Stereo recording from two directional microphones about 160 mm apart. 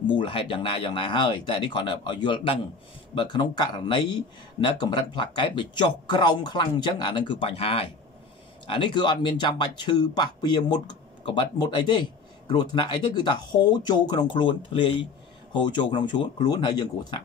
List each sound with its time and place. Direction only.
0.1 s speech: 30° left (ahead or behind)